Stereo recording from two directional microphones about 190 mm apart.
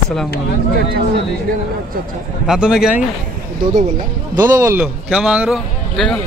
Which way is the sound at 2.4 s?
5° right (ahead or behind).